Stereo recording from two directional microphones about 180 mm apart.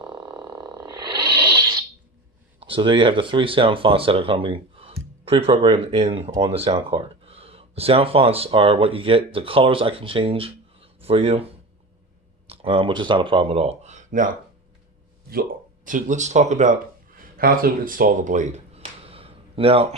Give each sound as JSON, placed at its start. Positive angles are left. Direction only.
{"t": 0.0, "sound": "a sound", "side_deg": -25}
{"t": 2.6, "sound": "speech", "side_deg": -30}
{"t": 12.5, "sound": "speech", "side_deg": -30}
{"t": 15.3, "sound": "speech", "side_deg": -55}
{"t": 17.3, "sound": "speech", "side_deg": -55}